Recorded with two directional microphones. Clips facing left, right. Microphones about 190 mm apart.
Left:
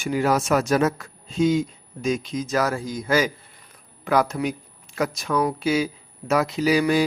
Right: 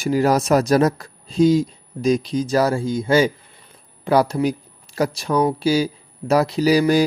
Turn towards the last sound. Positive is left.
turn(degrees=-35)  # may be behind; listen again after turning